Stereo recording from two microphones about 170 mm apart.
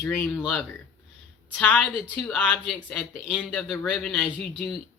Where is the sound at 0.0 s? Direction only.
10° left (ahead or behind).